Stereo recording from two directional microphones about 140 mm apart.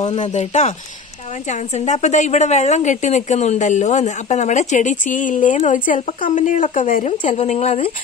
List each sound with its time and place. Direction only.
0.0 s speech: 35° left (ahead or behind)
0.3 s a woman's voice: 55° left (ahead or behind)